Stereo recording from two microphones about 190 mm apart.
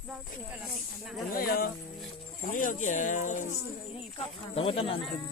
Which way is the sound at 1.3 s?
50° left (ahead or behind).